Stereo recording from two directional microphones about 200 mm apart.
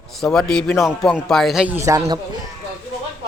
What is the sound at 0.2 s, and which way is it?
Speech, 5° left (ahead or behind).